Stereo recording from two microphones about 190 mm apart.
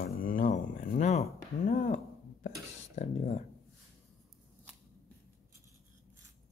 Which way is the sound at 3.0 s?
35° left (ahead or behind).